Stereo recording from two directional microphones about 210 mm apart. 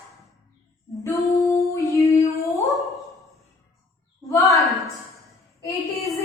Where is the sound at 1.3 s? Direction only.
15° left (ahead or behind).